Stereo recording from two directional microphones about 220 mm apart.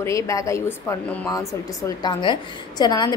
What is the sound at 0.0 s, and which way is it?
A woman's voice, 15° left (ahead or behind).